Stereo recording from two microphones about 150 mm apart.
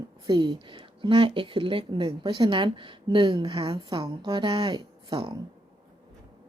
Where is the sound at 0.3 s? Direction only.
30° right (ahead or behind).